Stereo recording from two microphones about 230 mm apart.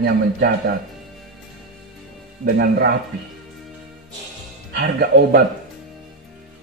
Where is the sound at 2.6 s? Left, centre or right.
Right.